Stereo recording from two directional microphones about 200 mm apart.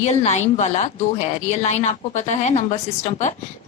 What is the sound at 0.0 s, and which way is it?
A woman's voice, 35° left (ahead or behind).